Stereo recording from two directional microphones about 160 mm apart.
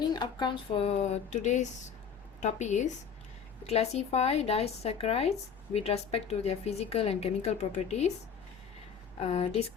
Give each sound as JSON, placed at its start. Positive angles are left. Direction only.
{"t": 0.1, "sound": "speech", "side_deg": 25}
{"t": 9.2, "sound": "speech", "side_deg": 40}